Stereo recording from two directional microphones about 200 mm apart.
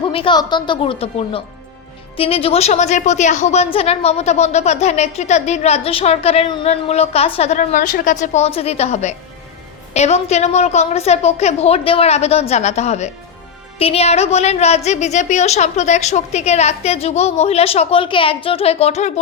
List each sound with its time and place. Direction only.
0.0 s a woman's voice: 25° left (ahead or behind)